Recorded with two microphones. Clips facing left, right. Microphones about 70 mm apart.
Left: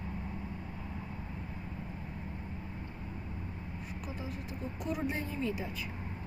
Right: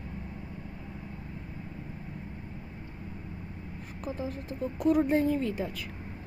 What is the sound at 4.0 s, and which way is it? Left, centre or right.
Speech, right.